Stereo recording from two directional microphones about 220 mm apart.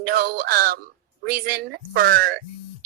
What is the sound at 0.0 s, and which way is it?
A woman's voice, 40° right (ahead or behind).